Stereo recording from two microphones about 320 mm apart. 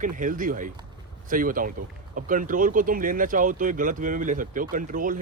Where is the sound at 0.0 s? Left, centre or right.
Right.